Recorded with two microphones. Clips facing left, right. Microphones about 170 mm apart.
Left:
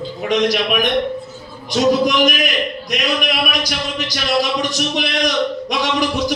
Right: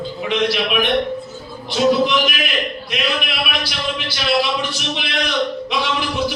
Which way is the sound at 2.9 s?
40° left (ahead or behind).